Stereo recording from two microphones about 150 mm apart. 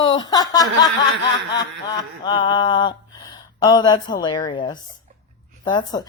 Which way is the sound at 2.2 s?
30° left (ahead or behind).